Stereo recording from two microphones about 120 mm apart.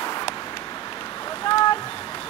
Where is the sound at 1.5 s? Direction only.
45° left (ahead or behind).